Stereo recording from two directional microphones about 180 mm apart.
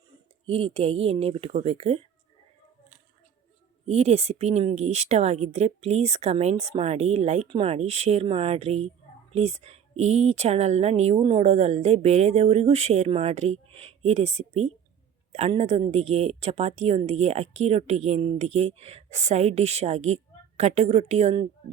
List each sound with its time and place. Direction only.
0.4 s speech: 35° right (ahead or behind)
3.8 s speech: 35° right (ahead or behind)